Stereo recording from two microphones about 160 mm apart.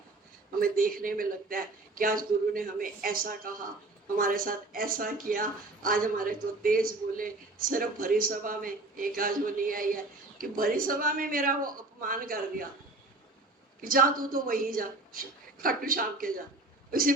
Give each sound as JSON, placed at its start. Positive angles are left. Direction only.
{"t": 0.6, "sound": "a woman's voice", "side_deg": -60}
{"t": 13.8, "sound": "a woman's voice", "side_deg": -60}